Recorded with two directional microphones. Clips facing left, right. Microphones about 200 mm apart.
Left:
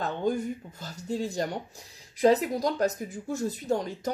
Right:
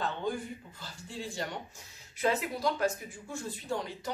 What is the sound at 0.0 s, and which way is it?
Speech, 45° left (ahead or behind).